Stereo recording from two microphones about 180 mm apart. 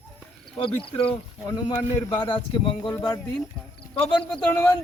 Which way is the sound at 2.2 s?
25° left (ahead or behind).